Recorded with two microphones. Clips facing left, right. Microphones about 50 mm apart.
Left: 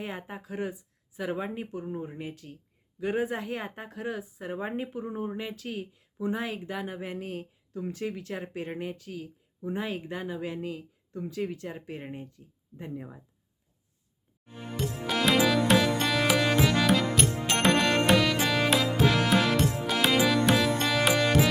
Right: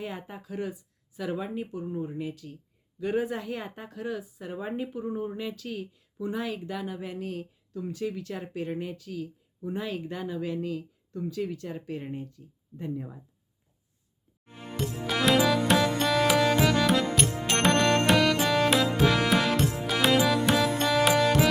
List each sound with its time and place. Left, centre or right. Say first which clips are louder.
0.0 s speech: even; left
12.9 s speech: right 3 dB; centre
14.8 s music: even; centre